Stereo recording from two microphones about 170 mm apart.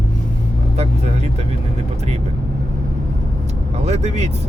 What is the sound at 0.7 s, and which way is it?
Speech, 40° right (ahead or behind).